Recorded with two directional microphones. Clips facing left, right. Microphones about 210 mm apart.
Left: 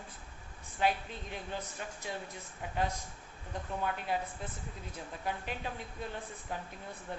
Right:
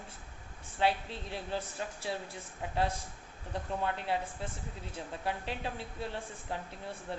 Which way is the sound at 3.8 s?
30° right (ahead or behind).